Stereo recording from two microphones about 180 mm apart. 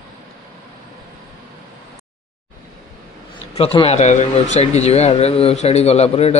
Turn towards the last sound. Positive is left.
turn(degrees=35)  # may be behind; listen again after turning